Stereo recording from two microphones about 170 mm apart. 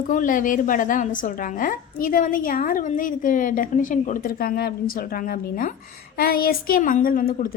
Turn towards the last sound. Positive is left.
turn(degrees=55)  # may be behind; listen again after turning